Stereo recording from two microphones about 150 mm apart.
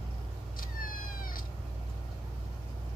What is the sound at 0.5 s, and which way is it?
Cat, 70° left (ahead or behind).